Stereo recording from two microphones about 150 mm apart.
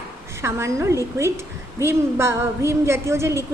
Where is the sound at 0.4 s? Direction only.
20° right (ahead or behind).